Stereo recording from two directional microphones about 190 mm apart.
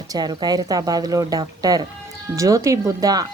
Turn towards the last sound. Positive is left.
turn(degrees=-20)  # may be behind; listen again after turning